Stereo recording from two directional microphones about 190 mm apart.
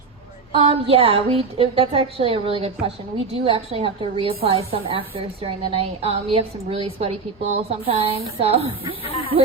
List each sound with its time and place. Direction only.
0.5 s a woman's voice: 30° right (ahead or behind)
9.0 s speech: 30° left (ahead or behind)